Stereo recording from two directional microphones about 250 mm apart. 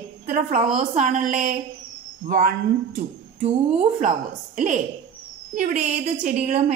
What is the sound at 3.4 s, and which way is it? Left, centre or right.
Speech, right.